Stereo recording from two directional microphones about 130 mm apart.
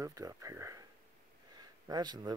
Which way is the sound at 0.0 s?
25° right (ahead or behind).